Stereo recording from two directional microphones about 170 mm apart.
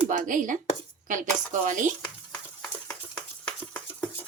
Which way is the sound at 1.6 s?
50° right (ahead or behind).